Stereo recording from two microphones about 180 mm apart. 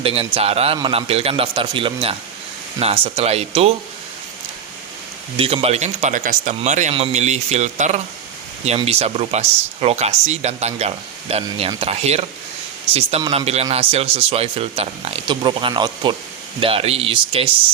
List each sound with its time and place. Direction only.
0.0 s speech: 30° right (ahead or behind)
5.6 s speech: 40° right (ahead or behind)